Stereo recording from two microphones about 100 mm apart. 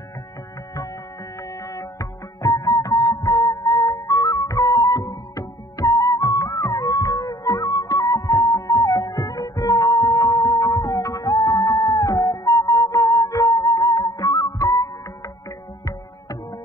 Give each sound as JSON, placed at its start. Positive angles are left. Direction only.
{"t": 1.7, "sound": "music", "side_deg": 35}